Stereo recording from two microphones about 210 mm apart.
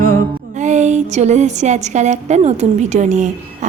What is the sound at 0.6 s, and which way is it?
A woman's voice, 35° right (ahead or behind).